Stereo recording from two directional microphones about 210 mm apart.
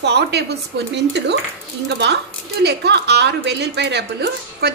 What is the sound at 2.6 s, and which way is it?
A woman's voice, 50° right (ahead or behind).